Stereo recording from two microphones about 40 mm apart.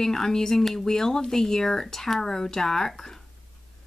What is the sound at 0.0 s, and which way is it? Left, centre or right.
Speech, centre.